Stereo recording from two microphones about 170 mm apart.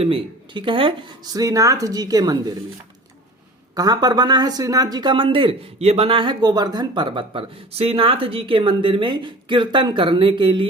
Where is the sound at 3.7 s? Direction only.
20° right (ahead or behind).